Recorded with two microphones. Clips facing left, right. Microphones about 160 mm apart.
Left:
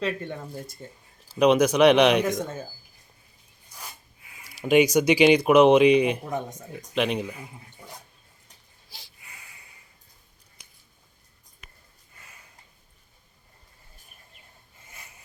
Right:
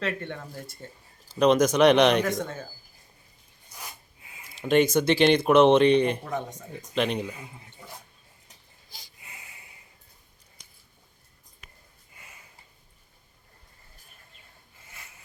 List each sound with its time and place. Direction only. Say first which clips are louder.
1.4 s speech: left 1 dB; 10° left (ahead or behind)
4.5 s speech: left 2 dB; 10° left (ahead or behind)